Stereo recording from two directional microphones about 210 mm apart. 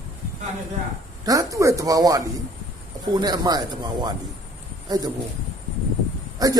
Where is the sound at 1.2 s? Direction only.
15° right (ahead or behind).